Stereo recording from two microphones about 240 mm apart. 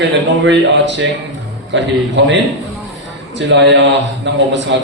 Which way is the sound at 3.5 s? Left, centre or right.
Right.